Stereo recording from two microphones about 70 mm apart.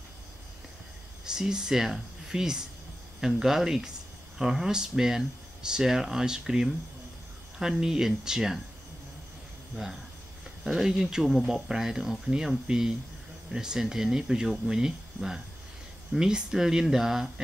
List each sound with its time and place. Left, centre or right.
1.2 s speech: centre
10.6 s speech: centre